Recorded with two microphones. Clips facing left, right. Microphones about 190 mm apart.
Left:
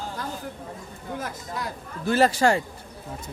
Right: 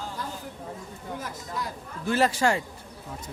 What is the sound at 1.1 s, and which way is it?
Speech, 90° left.